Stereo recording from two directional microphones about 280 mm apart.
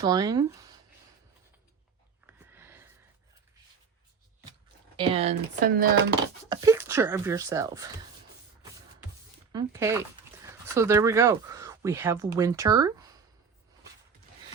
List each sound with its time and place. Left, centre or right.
0.0 s speech: centre
2.2 s a sound: centre
4.9 s speech: centre
6.5 s speech: centre
9.5 s speech: centre